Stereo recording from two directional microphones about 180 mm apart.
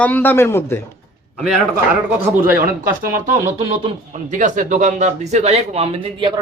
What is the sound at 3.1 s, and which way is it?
Speech, 50° right (ahead or behind).